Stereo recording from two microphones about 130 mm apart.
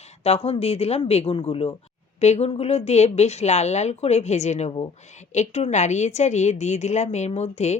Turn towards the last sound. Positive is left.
turn(degrees=60)  # may be behind; listen again after turning